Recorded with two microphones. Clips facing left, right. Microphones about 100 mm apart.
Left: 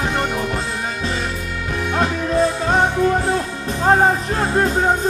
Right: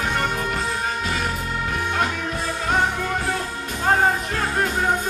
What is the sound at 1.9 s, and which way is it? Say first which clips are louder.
Music: left 8 dB; 30° left (ahead or behind).